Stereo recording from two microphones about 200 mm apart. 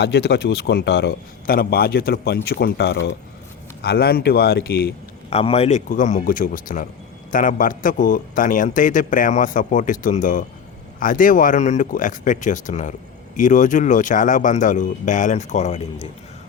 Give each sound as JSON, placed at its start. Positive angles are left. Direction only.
{"t": 0.0, "sound": "a man's voice", "side_deg": 55}
{"t": 5.3, "sound": "a man's voice", "side_deg": 30}